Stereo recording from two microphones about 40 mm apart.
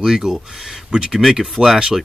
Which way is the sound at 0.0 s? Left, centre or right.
Centre.